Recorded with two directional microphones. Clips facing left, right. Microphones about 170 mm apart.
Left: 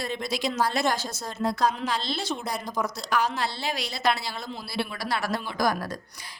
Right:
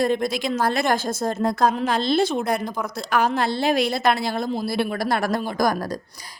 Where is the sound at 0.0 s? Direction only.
50° right (ahead or behind).